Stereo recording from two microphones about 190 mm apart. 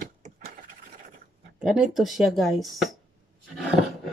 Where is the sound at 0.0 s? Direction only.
45° right (ahead or behind).